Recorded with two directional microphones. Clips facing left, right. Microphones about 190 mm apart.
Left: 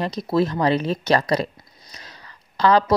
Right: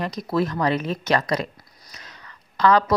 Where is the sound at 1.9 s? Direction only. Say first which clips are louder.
Left 1 dB; 30° left (ahead or behind).